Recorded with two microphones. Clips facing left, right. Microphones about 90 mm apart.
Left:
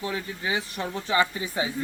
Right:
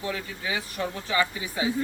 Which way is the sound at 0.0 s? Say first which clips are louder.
Left 1 dB; 25° left (ahead or behind).